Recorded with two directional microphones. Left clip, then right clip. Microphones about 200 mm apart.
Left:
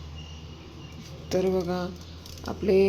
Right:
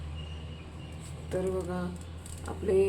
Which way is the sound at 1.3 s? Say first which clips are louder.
Left 6 dB; 35° left (ahead or behind).